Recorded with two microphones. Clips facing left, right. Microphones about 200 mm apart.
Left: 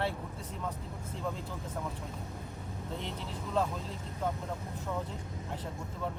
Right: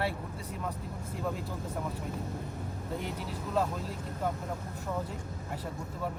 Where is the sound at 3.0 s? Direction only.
5° right (ahead or behind).